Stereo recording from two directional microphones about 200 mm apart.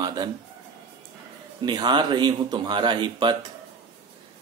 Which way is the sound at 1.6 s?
20° right (ahead or behind).